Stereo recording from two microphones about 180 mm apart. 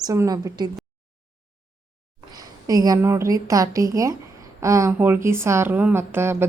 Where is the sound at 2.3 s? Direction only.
20° right (ahead or behind).